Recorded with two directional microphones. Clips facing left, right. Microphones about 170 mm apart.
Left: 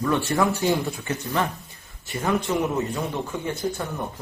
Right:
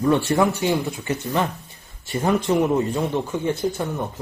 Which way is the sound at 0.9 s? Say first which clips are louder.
Right 3 dB; 20° right (ahead or behind).